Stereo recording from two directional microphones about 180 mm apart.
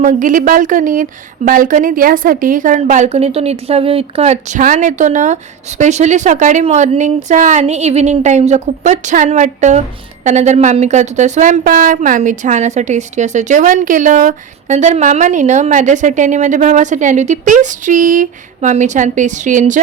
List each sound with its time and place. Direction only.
0.0 s a woman's voice: 45° right (ahead or behind)